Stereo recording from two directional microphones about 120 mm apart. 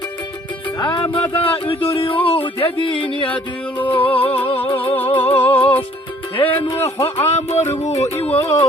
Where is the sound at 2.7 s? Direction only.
45° left (ahead or behind).